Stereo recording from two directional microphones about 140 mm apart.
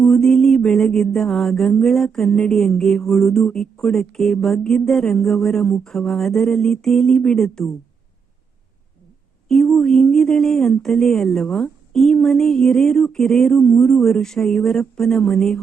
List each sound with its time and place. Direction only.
0.0 s mantra: 5° left (ahead or behind)
9.5 s mantra: 5° left (ahead or behind)